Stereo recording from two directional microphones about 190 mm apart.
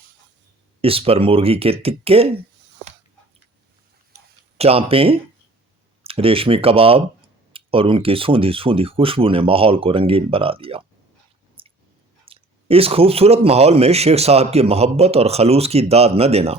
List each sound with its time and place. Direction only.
0.8 s speech: 30° right (ahead or behind)
4.5 s speech: 30° right (ahead or behind)
11.6 s a sound: 30° right (ahead or behind)
12.2 s speech: 30° right (ahead or behind)